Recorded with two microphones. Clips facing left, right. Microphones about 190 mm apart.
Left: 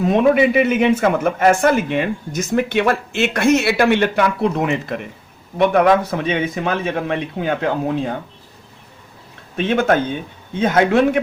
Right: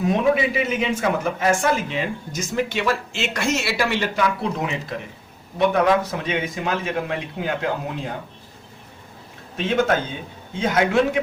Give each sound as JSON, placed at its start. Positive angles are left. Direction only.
{"t": 0.1, "sound": "a man's voice", "side_deg": 60}
{"t": 9.6, "sound": "a man's voice", "side_deg": 55}